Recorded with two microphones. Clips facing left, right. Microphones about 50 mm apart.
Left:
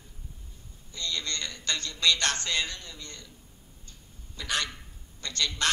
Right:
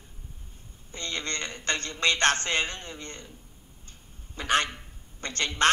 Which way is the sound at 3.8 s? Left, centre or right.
Right.